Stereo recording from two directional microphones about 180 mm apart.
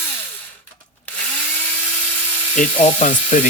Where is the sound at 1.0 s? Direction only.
5° left (ahead or behind).